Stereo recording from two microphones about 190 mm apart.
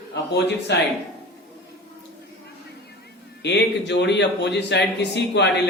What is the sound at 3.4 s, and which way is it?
Speech, 65° left (ahead or behind).